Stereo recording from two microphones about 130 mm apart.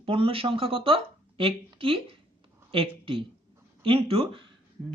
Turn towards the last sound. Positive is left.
turn(degrees=-45)  # may be behind; listen again after turning